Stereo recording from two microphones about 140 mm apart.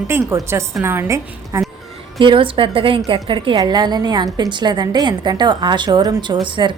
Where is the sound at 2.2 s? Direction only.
40° right (ahead or behind).